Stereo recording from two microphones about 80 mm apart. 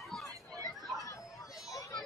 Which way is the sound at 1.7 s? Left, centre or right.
Left.